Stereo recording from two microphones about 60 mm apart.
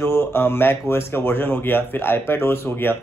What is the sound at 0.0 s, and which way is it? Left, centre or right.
Speech, left.